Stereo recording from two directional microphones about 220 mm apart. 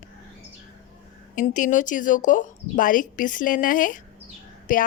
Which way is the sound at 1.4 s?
35° left (ahead or behind).